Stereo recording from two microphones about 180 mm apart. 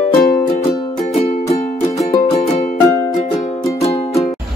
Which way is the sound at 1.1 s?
35° left (ahead or behind).